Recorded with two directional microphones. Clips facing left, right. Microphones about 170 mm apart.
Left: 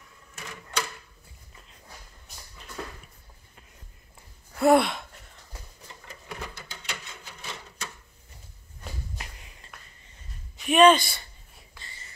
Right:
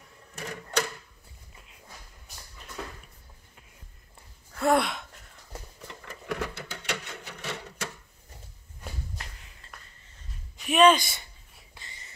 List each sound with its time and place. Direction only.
0.4 s a sound: 40° right (ahead or behind)
4.6 s gasp: 5° left (ahead or behind)
5.9 s printer: 70° right (ahead or behind)
9.2 s a sound: 15° left (ahead or behind)
10.6 s speech: centre (ahead or behind)
11.0 s speech: 20° right (ahead or behind)
11.8 s whispering: 15° right (ahead or behind)